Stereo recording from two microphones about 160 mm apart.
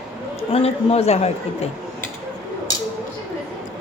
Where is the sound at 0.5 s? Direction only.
40° left (ahead or behind).